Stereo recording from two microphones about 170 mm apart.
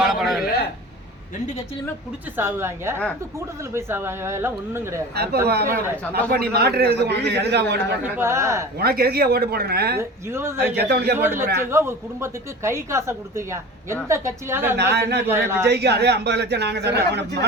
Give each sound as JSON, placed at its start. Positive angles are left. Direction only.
{"t": 0.0, "sound": "a sound", "side_deg": 0}
{"t": 2.3, "sound": "speech", "side_deg": -15}
{"t": 5.1, "sound": "a man's voice", "side_deg": -70}
{"t": 8.0, "sound": "speech", "side_deg": -15}
{"t": 8.8, "sound": "a man's voice", "side_deg": -65}
{"t": 10.0, "sound": "speech", "side_deg": -15}
{"t": 10.8, "sound": "a man's voice", "side_deg": -70}
{"t": 11.2, "sound": "speech", "side_deg": -15}
{"t": 15.7, "sound": "a man's voice", "side_deg": -75}